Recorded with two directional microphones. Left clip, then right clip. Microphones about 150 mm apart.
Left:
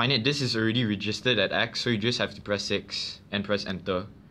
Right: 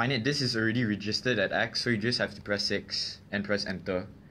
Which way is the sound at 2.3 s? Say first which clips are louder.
Left 2 dB; 70° left (ahead or behind).